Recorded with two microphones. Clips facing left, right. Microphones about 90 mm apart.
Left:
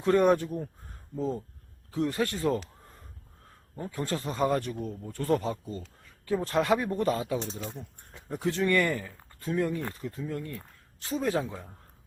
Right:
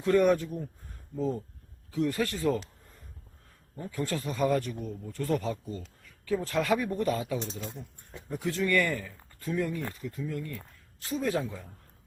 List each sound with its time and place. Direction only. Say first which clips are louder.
0.0 s speech: left 1 dB; 30° left (ahead or behind)
1.9 s speech: even; 35° left (ahead or behind)
3.8 s speech: even; 35° left (ahead or behind)